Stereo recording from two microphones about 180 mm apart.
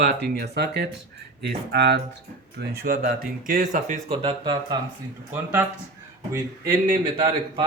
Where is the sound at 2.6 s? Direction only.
55° right (ahead or behind); by 4.8 s 25° right (ahead or behind).